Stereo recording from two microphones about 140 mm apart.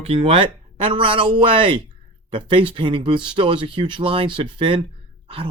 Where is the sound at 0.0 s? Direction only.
45° right (ahead or behind).